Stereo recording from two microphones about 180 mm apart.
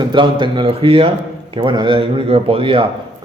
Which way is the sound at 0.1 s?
25° right (ahead or behind).